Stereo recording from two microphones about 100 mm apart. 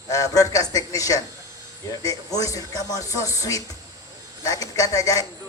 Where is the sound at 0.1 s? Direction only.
35° left (ahead or behind).